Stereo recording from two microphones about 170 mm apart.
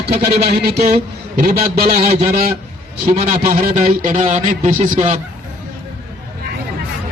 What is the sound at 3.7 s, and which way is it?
Speech, 55° right (ahead or behind).